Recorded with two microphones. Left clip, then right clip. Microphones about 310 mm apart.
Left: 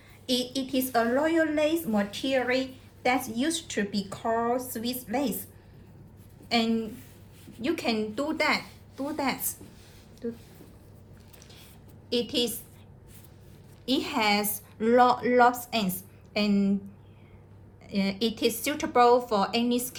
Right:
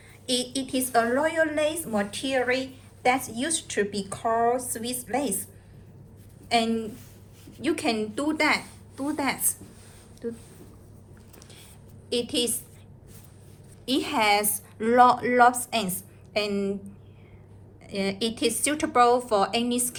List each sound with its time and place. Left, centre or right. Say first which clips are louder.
0.3 s a woman's voice: right 1 dB; right
6.5 s a woman's voice: right 3 dB; right
12.0 s a woman's voice: right 1 dB; right
13.8 s a woman's voice: right 3 dB; right
17.8 s a woman's voice: right 1 dB; right